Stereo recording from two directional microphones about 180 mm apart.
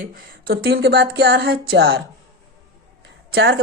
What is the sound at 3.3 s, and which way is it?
Speech, 65° right (ahead or behind).